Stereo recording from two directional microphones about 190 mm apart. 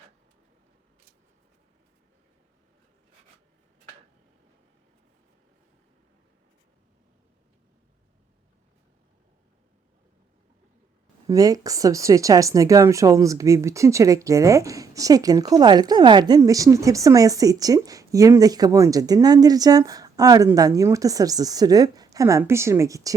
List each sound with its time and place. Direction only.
11.3 s speech: 20° right (ahead or behind)